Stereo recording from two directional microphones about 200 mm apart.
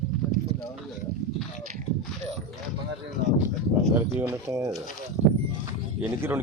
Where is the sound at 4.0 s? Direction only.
10° right (ahead or behind).